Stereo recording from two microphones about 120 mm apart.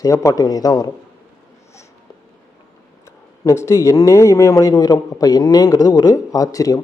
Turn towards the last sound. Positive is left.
turn(degrees=30)  # may be behind; listen again after turning